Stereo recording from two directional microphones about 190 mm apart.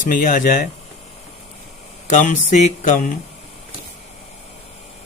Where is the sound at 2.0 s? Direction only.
40° left (ahead or behind).